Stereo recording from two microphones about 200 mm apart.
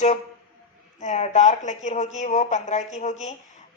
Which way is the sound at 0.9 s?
35° left (ahead or behind).